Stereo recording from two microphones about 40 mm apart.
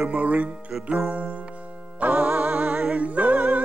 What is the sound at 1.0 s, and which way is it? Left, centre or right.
Music, right.